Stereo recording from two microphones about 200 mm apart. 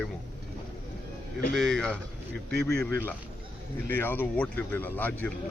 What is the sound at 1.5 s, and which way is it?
Speech, centre (ahead or behind).